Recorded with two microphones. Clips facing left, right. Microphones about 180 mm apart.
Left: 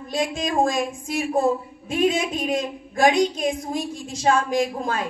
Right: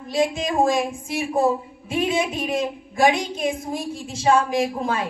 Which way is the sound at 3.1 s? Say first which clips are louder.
Left 3 dB; 55° right (ahead or behind).